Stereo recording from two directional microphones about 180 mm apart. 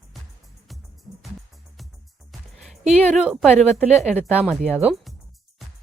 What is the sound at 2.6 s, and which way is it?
A woman's voice, 5° right (ahead or behind).